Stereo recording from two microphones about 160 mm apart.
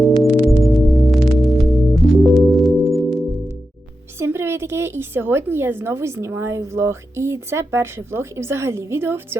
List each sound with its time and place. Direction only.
0.4 s singing bowl: centre (ahead or behind)
4.2 s a woman's voice: 15° right (ahead or behind)